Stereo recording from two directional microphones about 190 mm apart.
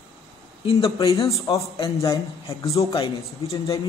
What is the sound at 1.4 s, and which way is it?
A man's voice, 20° left (ahead or behind).